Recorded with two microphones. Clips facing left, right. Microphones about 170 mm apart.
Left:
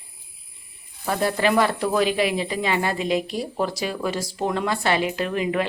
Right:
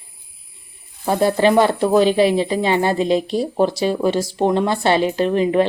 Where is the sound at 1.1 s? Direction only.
30° right (ahead or behind).